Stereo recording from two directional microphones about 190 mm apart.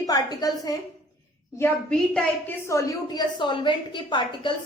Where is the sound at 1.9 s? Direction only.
10° left (ahead or behind).